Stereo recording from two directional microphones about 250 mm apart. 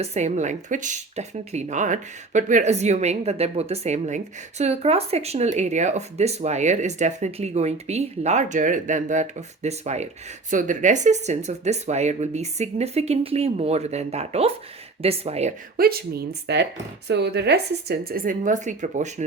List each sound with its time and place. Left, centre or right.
0.0 s a woman's voice: right